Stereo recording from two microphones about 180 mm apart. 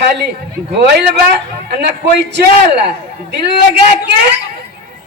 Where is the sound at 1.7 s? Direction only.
65° right (ahead or behind).